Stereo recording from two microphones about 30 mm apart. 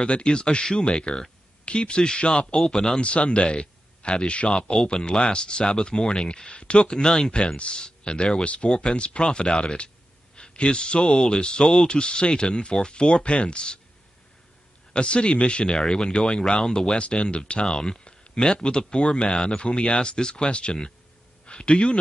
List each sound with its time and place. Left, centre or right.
0.0 s speech: left
2.6 s speech: centre
3.0 s speech: left
8.5 s speech: left
11.6 s speech: centre
11.9 s speech: left
14.9 s speech: left
17.0 s speech: left
17.6 s speech: centre